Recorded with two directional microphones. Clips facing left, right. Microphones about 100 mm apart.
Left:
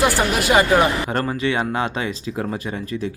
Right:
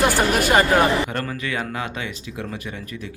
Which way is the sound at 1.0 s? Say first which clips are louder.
Left 6 dB; 30° left (ahead or behind).